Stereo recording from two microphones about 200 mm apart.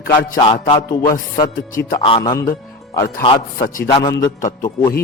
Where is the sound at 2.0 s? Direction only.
25° left (ahead or behind).